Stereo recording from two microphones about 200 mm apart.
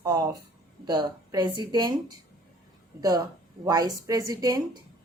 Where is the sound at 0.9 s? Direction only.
20° right (ahead or behind).